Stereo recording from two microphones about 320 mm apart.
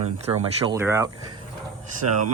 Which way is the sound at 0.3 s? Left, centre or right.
Centre.